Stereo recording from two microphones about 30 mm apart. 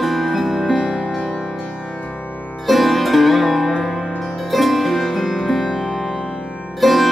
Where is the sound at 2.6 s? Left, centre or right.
Centre.